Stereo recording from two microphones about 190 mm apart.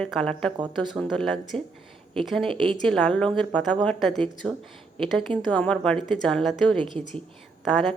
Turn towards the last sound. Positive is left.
turn(degrees=0)  # may be behind; listen again after turning